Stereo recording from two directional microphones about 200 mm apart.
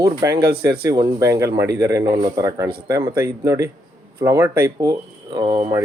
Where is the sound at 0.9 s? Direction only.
20° right (ahead or behind).